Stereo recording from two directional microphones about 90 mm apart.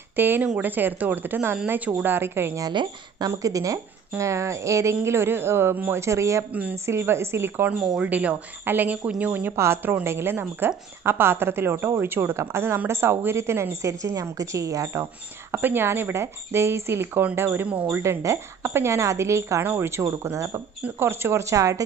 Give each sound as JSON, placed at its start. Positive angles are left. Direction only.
{"t": 0.1, "sound": "speech", "side_deg": -20}
{"t": 2.7, "sound": "speech", "side_deg": -60}
{"t": 3.3, "sound": "a woman's voice", "side_deg": -40}
{"t": 5.9, "sound": "a woman's voice", "side_deg": -35}
{"t": 7.7, "sound": "a woman's voice", "side_deg": -10}
{"t": 15.6, "sound": "a woman's voice", "side_deg": -25}
{"t": 20.8, "sound": "a woman's voice", "side_deg": -25}